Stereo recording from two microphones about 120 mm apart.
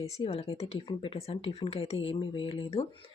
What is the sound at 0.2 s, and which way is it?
Speech, 55° left (ahead or behind).